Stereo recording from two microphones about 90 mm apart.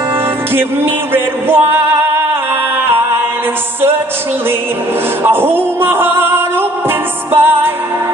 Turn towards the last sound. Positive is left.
turn(degrees=-25)  # may be behind; listen again after turning